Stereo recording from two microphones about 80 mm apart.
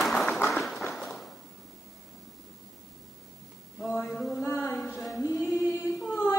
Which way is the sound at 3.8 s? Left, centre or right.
Centre.